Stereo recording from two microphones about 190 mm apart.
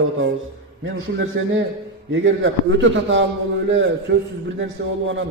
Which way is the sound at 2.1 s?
80° right.